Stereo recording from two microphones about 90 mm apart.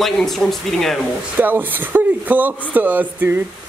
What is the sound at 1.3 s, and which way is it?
Speech, 20° right (ahead or behind).